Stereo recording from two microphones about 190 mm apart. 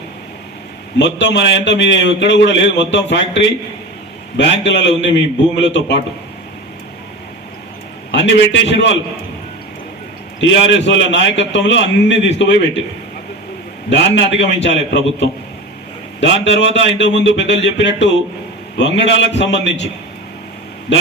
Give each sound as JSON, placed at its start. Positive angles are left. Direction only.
{"t": 0.9, "sound": "a man's voice", "side_deg": 65}
{"t": 8.1, "sound": "a man's voice", "side_deg": 70}
{"t": 10.4, "sound": "a man's voice", "side_deg": 70}
{"t": 13.9, "sound": "a man's voice", "side_deg": 70}
{"t": 16.2, "sound": "a man's voice", "side_deg": 70}
{"t": 20.9, "sound": "a man's voice", "side_deg": 70}